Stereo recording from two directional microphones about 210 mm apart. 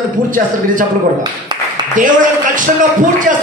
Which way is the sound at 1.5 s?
20° right (ahead or behind).